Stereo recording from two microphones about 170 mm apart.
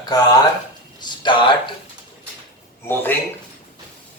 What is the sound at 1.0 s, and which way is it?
Speech, 25° left (ahead or behind).